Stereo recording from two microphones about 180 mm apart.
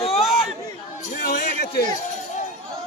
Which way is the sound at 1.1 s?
65° left (ahead or behind).